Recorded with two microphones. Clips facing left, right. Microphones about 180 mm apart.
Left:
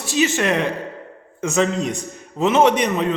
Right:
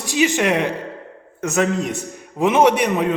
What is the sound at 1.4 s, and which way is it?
A man's voice, 5° right (ahead or behind).